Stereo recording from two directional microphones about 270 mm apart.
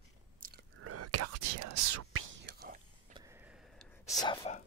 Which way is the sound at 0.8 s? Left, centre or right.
Right.